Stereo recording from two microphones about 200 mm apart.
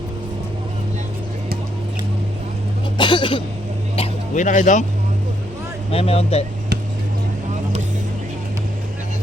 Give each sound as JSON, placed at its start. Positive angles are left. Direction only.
{"t": 3.0, "sound": "speech", "side_deg": 25}
{"t": 3.9, "sound": "a sound", "side_deg": 35}
{"t": 5.9, "sound": "speech", "side_deg": 30}